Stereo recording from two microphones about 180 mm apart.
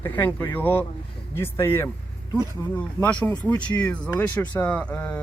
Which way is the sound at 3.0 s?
10° left (ahead or behind).